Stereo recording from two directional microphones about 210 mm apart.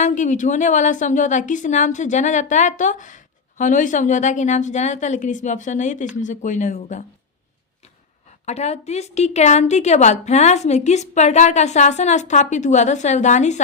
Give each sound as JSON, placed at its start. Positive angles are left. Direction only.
{"t": 0.0, "sound": "a woman's voice", "side_deg": 35}
{"t": 8.4, "sound": "a woman's voice", "side_deg": 30}